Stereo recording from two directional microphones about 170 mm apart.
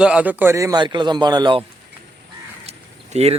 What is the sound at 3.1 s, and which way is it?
Speech, 40° right (ahead or behind).